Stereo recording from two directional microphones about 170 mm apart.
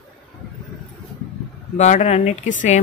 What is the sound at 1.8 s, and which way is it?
Speech, 45° left (ahead or behind).